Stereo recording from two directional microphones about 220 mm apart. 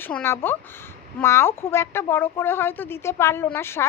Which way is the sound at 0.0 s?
10° left (ahead or behind).